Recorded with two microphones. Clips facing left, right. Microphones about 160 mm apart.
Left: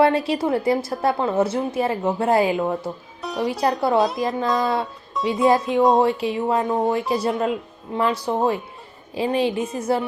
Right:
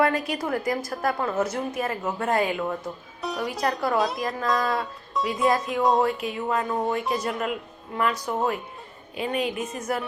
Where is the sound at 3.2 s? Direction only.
Centre (ahead or behind).